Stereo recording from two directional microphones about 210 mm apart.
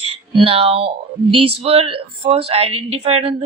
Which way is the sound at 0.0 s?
25° right (ahead or behind).